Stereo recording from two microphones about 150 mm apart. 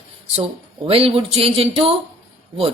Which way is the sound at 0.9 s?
40° right (ahead or behind).